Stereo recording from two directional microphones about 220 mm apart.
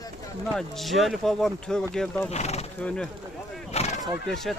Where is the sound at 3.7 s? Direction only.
30° left (ahead or behind).